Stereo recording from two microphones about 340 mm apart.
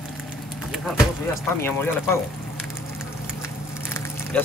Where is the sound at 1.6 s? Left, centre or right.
Centre.